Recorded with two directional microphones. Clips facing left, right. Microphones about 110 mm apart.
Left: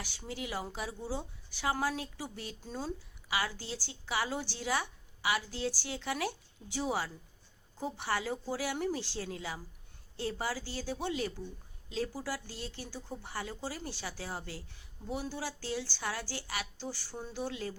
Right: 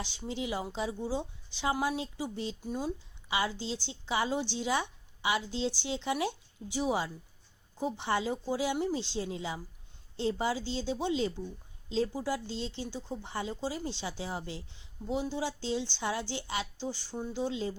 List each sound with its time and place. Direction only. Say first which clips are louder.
0.0 s speech: right 5 dB; 20° right (ahead or behind)